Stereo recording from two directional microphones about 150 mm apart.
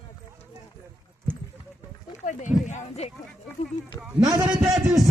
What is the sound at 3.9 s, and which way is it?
Speech, 20° right (ahead or behind).